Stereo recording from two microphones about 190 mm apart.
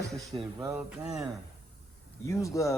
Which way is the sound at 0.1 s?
Centre (ahead or behind).